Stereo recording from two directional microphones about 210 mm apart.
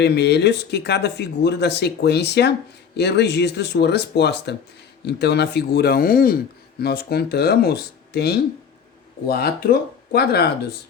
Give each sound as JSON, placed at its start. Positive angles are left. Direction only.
{"t": 0.0, "sound": "speech", "side_deg": 50}